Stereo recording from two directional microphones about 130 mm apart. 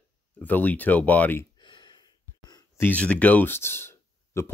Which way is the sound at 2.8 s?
10° left (ahead or behind).